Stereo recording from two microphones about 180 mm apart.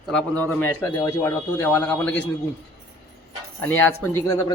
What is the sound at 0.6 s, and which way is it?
A man's voice, 15° left (ahead or behind).